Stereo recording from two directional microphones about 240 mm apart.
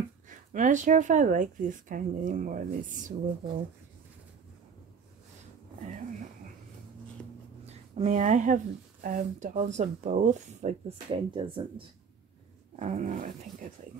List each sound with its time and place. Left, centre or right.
0.3 s speech: right
7.6 s a woman's voice: right
12.7 s speech: right